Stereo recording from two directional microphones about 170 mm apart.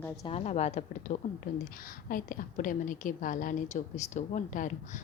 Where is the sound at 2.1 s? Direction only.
50° left (ahead or behind).